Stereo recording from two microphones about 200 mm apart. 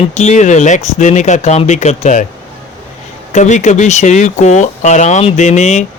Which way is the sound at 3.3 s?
35° left (ahead or behind).